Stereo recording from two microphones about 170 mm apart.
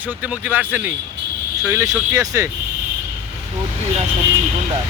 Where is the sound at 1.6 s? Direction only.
20° right (ahead or behind).